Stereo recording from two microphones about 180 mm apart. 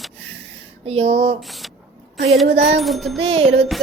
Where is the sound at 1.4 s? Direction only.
Centre (ahead or behind).